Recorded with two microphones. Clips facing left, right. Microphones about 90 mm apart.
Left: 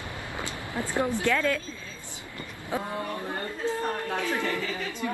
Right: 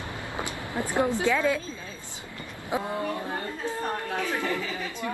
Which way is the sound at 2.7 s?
15° right (ahead or behind).